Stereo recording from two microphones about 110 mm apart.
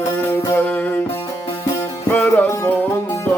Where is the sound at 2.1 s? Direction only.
10° left (ahead or behind).